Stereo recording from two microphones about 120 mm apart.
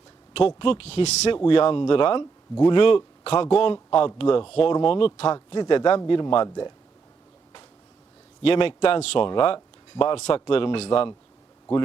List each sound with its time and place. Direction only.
0.3 s speech: 50° left (ahead or behind)
1.5 s speech: 45° left (ahead or behind)
8.4 s speech: 50° left (ahead or behind)
10.2 s speech: 65° left (ahead or behind)
10.4 s speech: 45° left (ahead or behind)